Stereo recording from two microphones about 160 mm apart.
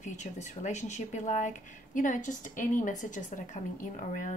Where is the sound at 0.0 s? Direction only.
45° left (ahead or behind).